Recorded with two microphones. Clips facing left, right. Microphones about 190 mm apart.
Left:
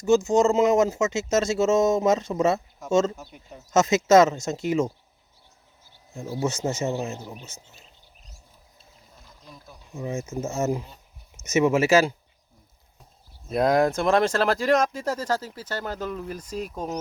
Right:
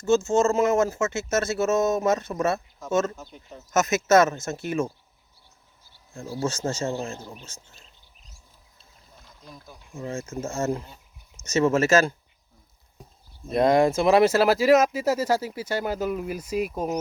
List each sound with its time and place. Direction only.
0.3 s speech: 15° left (ahead or behind)
3.2 s speech: 10° left (ahead or behind)
3.7 s speech: 25° left (ahead or behind)
6.4 s speech: 20° left (ahead or behind)
9.4 s speech: centre (ahead or behind)
10.0 s speech: 20° left (ahead or behind)
13.5 s speech: centre (ahead or behind)